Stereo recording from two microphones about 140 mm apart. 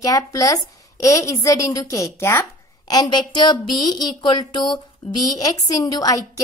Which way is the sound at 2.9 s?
30° left (ahead or behind).